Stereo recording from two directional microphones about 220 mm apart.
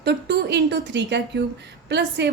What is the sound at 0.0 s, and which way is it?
A woman's voice, 50° right (ahead or behind).